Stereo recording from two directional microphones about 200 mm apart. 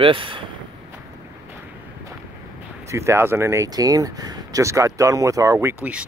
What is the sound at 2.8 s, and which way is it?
Speech, 15° right (ahead or behind).